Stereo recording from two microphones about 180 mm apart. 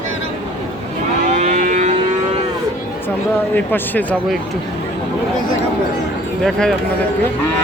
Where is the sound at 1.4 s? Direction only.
40° right (ahead or behind).